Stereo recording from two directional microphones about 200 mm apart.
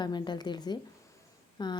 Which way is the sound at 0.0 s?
20° left (ahead or behind).